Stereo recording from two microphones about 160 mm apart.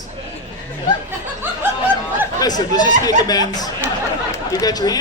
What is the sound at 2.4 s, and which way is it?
Speech, 25° left (ahead or behind).